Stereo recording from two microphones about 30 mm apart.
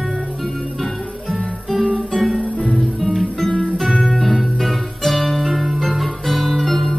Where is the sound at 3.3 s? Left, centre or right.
Left.